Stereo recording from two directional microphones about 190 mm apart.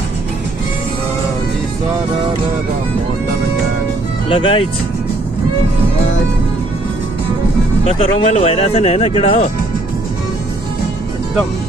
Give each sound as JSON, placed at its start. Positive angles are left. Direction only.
{"t": 4.3, "sound": "speech", "side_deg": 25}
{"t": 7.8, "sound": "speech", "side_deg": 35}